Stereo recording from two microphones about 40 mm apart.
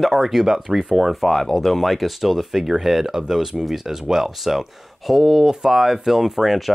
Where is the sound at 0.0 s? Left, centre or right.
Centre.